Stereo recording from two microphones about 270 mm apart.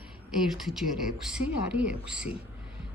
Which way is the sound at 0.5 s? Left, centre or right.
Centre.